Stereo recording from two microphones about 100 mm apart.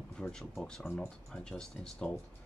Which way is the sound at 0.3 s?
5° left (ahead or behind).